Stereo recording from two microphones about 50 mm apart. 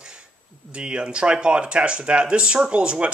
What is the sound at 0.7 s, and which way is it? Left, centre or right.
Speech, right.